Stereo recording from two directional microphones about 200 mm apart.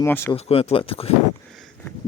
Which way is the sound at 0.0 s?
10° left (ahead or behind).